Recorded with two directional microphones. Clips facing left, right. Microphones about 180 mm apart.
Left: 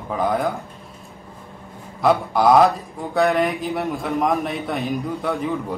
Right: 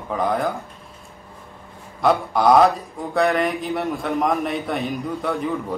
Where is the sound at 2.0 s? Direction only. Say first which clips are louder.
Left 1 dB; centre (ahead or behind).